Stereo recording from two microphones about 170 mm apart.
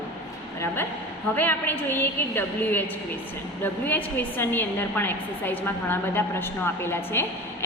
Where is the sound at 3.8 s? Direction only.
10° left (ahead or behind).